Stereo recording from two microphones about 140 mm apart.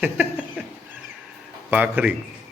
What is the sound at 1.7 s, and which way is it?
Speech, 10° right (ahead or behind).